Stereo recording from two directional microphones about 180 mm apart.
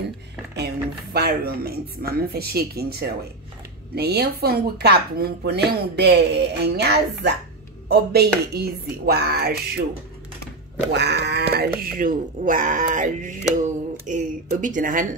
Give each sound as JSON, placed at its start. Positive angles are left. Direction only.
{"t": 0.6, "sound": "speech", "side_deg": -60}
{"t": 10.9, "sound": "speech", "side_deg": -70}
{"t": 11.8, "sound": "speech", "side_deg": -50}